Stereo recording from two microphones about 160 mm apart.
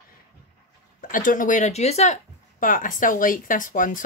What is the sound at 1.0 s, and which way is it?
A woman's voice, 55° left (ahead or behind).